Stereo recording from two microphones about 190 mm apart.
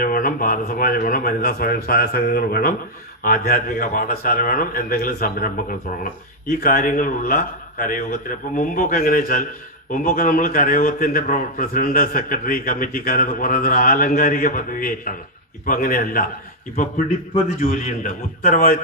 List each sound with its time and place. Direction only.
0.0 s a man's voice: 45° left (ahead or behind)
17.6 s a man's voice: 45° left (ahead or behind)